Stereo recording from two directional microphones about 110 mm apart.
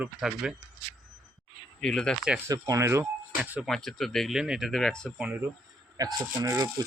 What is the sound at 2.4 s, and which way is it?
Speech, 30° right (ahead or behind).